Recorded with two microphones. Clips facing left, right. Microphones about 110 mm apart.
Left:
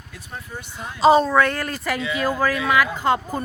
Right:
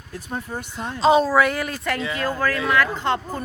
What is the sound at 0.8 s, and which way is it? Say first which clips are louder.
Speech: left 2 dB; 5° left (ahead or behind).